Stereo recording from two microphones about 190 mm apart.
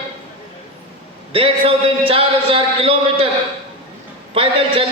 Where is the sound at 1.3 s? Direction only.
30° right (ahead or behind).